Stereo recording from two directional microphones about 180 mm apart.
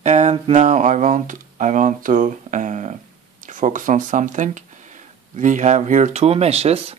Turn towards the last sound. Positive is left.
turn(degrees=-35)  # may be behind; listen again after turning